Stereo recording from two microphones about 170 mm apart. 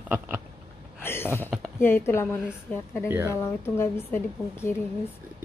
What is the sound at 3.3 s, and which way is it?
A woman's voice, 15° left (ahead or behind).